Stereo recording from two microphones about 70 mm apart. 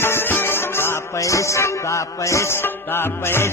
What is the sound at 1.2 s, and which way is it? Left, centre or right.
Music, left.